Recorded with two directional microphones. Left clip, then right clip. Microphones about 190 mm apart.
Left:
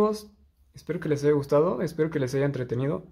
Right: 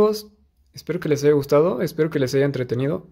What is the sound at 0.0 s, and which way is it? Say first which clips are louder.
Speech: right 6 dB; 25° right (ahead or behind).